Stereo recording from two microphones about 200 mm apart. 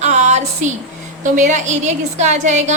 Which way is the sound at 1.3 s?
40° right (ahead or behind).